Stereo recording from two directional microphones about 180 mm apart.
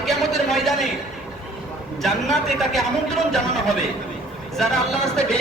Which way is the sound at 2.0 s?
Centre (ahead or behind).